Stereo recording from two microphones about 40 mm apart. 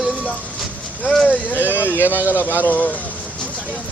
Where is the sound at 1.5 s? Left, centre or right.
Left.